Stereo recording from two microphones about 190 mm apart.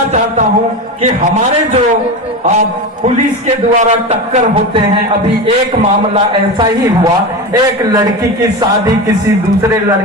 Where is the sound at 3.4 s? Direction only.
35° right (ahead or behind).